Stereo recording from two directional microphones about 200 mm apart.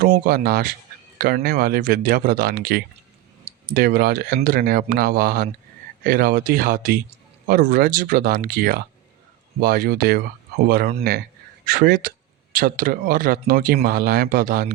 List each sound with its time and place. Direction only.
0.0 s speech: 50° right (ahead or behind)